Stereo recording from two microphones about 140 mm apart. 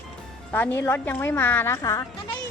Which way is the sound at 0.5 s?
15° left (ahead or behind).